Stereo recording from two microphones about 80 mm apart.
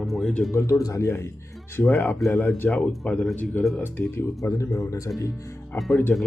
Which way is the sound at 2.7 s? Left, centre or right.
Centre.